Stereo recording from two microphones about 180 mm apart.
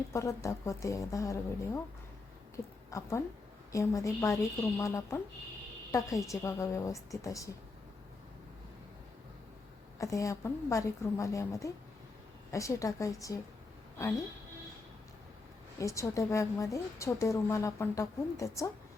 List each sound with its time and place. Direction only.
0.1 s a woman's voice: 15° left (ahead or behind)
2.9 s a woman's voice: 15° left (ahead or behind)
10.0 s a woman's voice: 15° left (ahead or behind)
15.8 s a woman's voice: 15° left (ahead or behind)